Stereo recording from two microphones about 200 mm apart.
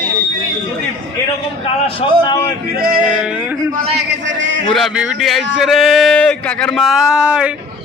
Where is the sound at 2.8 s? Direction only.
45° right (ahead or behind).